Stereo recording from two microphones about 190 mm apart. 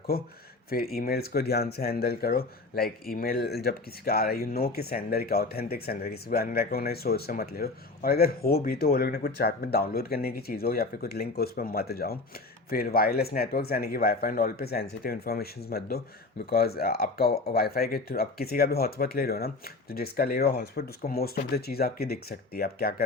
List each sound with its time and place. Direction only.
0.1 s speech: 50° left (ahead or behind)